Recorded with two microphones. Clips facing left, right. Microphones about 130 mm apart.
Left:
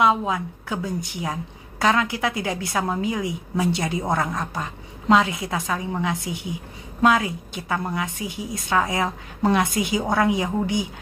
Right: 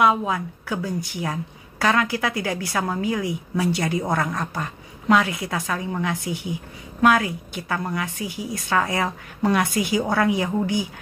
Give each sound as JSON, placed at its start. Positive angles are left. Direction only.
{"t": 0.0, "sound": "a woman's voice", "side_deg": 25}